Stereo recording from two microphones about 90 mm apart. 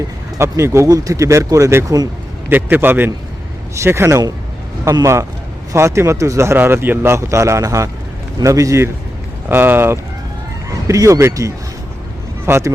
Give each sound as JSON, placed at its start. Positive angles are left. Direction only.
{"t": 0.3, "sound": "speech", "side_deg": -30}
{"t": 2.5, "sound": "a man's voice", "side_deg": -20}
{"t": 5.7, "sound": "speech", "side_deg": -30}
{"t": 9.5, "sound": "a man's voice", "side_deg": -25}
{"t": 10.8, "sound": "a man's voice", "side_deg": -35}